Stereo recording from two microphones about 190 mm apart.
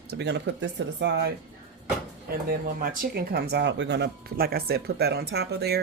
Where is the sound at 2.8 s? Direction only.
50° right (ahead or behind).